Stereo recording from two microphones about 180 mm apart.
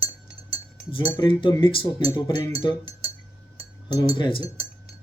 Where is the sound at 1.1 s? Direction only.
25° left (ahead or behind).